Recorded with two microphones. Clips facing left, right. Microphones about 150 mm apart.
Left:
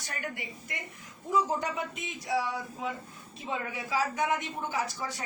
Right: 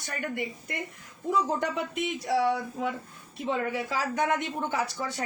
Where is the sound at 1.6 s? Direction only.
70° right (ahead or behind).